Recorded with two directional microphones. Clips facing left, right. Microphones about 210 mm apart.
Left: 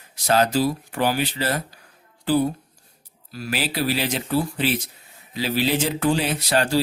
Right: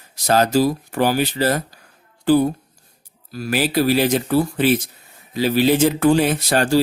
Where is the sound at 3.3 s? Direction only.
45° right (ahead or behind).